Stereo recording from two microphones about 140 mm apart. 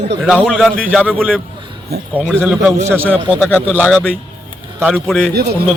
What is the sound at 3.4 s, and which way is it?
Speech, 15° left (ahead or behind).